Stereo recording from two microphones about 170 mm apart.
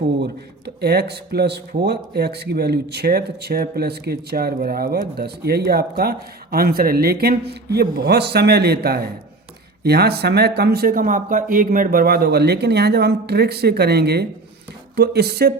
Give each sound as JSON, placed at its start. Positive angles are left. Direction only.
{"t": 0.2, "sound": "speech", "side_deg": -75}